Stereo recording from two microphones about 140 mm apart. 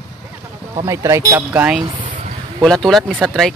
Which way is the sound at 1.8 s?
35° right (ahead or behind).